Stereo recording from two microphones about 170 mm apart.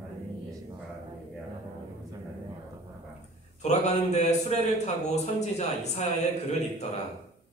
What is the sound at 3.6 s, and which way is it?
A man's voice, 40° left (ahead or behind).